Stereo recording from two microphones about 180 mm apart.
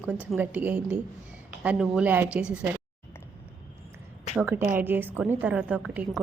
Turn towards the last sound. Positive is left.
turn(degrees=-5)  # may be behind; listen again after turning